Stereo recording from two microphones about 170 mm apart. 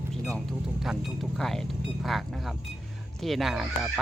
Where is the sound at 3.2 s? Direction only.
Centre (ahead or behind).